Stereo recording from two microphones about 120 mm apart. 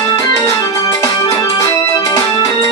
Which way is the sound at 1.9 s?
30° left (ahead or behind).